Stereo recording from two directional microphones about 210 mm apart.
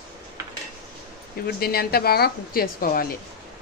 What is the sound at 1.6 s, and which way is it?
Speech, 45° left (ahead or behind).